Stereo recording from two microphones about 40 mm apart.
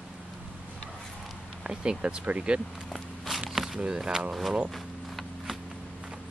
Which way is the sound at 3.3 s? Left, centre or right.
Centre.